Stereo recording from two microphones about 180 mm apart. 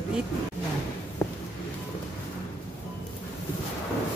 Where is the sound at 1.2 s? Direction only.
15° left (ahead or behind).